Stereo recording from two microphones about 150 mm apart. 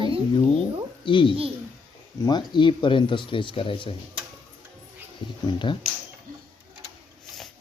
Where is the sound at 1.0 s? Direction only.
35° left (ahead or behind).